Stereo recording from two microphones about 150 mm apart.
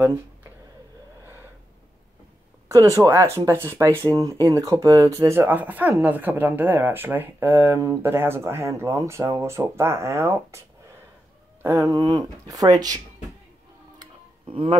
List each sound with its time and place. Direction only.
0.0 s a sound: 15° right (ahead or behind)
1.2 s gasp: 15° right (ahead or behind)
2.7 s speech: 20° right (ahead or behind)
11.6 s speech: 20° right (ahead or behind)
13.9 s music: 35° right (ahead or behind)